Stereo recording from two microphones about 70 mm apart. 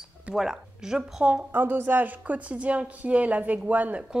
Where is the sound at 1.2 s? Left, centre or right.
Centre.